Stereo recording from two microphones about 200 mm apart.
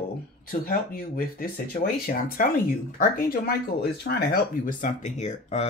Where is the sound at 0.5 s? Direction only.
45° left (ahead or behind).